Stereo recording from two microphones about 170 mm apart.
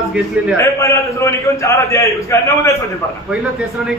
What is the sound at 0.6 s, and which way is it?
A man's voice, 15° left (ahead or behind).